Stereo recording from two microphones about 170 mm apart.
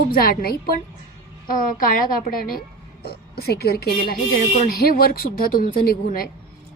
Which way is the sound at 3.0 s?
70° left (ahead or behind).